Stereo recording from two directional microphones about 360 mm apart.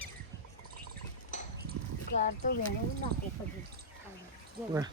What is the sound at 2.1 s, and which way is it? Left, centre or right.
Speech, left.